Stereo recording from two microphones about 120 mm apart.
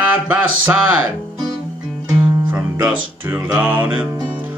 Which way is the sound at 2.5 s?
15° right (ahead or behind).